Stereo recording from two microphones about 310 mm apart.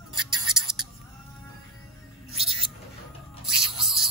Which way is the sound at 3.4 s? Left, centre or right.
Centre.